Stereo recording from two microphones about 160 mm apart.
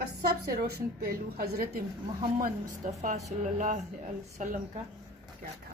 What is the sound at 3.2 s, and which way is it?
A woman's voice, 55° right (ahead or behind).